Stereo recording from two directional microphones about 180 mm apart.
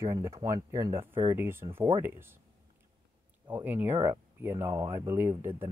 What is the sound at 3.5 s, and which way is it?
Speech, 10° right (ahead or behind).